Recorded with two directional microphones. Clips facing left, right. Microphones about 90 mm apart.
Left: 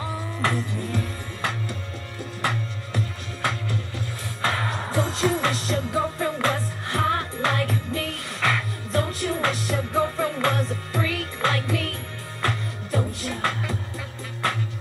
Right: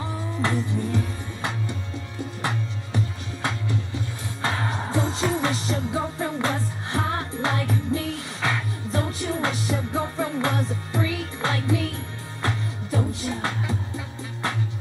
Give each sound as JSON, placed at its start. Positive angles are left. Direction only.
{"t": 0.4, "sound": "music", "side_deg": -20}
{"t": 3.4, "sound": "music", "side_deg": -20}